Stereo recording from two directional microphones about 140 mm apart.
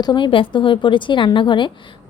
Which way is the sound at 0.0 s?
35° left (ahead or behind).